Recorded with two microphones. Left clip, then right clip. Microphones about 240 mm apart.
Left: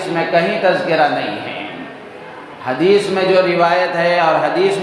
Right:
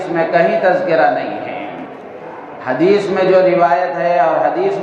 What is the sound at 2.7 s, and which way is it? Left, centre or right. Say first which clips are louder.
A man's voice: even; left.